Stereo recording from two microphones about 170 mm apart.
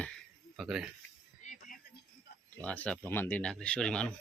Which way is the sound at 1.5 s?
50° left (ahead or behind).